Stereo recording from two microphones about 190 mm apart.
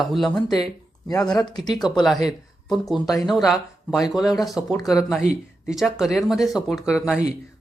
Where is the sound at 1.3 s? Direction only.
20° left (ahead or behind).